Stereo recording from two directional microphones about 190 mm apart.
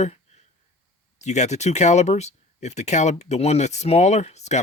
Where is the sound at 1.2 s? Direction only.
35° left (ahead or behind).